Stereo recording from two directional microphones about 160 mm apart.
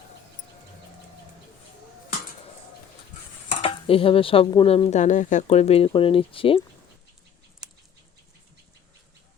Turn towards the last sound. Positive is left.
turn(degrees=-5)  # may be behind; listen again after turning